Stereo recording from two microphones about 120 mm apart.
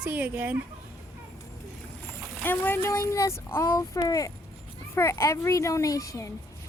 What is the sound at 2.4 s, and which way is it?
Speech, 15° left (ahead or behind).